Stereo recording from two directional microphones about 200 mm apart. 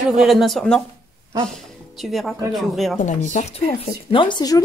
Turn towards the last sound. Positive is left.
turn(degrees=20)  # may be behind; listen again after turning